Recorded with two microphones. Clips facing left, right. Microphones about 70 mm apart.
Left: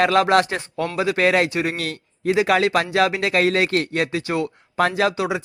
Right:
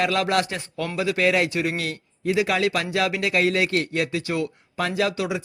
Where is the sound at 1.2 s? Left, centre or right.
Left.